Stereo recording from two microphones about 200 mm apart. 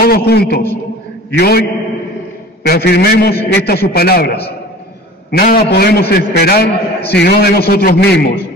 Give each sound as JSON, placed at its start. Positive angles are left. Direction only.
{"t": 0.0, "sound": "a man's voice", "side_deg": 50}
{"t": 2.6, "sound": "a man's voice", "side_deg": 55}